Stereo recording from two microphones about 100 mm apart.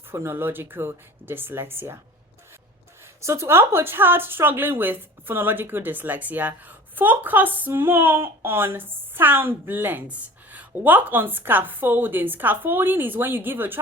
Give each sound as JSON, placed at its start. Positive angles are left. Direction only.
{"t": 0.1, "sound": "a woman's voice", "side_deg": -25}
{"t": 3.2, "sound": "a woman's voice", "side_deg": -25}